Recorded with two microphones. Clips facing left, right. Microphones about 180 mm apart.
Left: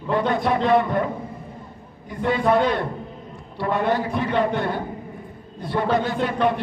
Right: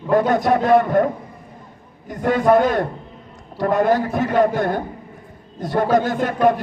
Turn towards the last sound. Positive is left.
turn(degrees=-45)  # may be behind; listen again after turning